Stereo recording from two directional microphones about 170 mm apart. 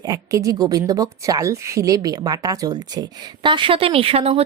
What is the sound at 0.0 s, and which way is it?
A woman's voice, 20° right (ahead or behind).